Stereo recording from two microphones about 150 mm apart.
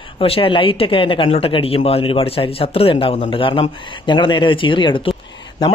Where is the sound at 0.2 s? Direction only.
35° left (ahead or behind).